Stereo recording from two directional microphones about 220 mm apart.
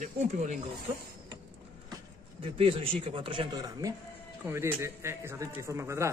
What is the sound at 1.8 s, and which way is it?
A man's voice, 20° right (ahead or behind).